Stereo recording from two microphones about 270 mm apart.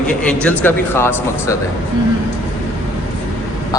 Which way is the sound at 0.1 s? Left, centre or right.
Centre.